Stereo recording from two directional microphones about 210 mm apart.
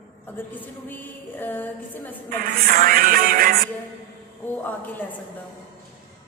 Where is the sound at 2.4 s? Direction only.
45° right (ahead or behind).